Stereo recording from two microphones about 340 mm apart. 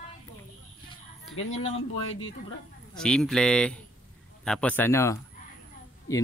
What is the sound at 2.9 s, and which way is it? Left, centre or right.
Speech, centre.